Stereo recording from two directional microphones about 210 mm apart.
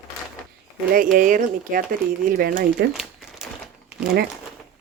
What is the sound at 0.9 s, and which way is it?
Speech, 40° right (ahead or behind).